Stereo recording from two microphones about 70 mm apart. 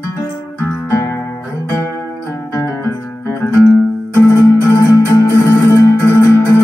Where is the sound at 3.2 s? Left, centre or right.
Left.